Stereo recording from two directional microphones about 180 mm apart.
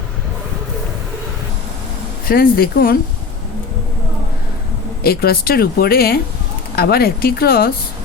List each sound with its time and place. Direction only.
2.2 s a woman's voice: 55° left (ahead or behind)
5.0 s a woman's voice: 60° left (ahead or behind)